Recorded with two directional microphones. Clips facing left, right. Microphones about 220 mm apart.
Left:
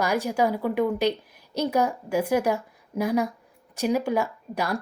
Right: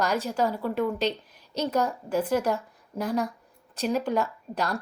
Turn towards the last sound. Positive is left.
turn(degrees=10)  # may be behind; listen again after turning